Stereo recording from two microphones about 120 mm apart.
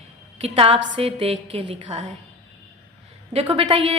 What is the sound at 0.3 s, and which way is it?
A woman's voice, 60° right (ahead or behind).